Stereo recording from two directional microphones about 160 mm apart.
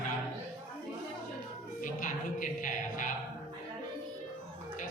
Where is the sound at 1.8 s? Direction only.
55° left (ahead or behind).